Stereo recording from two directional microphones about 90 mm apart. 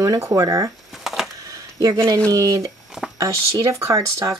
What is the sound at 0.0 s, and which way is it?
Speech, 35° right (ahead or behind).